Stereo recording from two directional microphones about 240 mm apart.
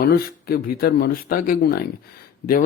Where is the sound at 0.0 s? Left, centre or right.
Left.